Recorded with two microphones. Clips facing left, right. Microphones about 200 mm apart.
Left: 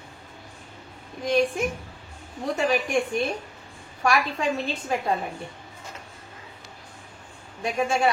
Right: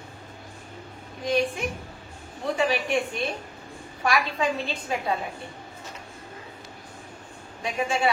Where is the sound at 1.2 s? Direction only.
45° left (ahead or behind).